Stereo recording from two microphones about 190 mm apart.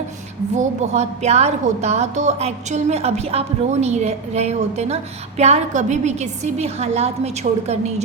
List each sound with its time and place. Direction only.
0.5 s a woman's voice: 35° right (ahead or behind)